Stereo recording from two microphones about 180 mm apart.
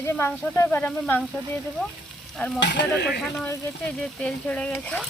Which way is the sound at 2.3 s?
5° left (ahead or behind).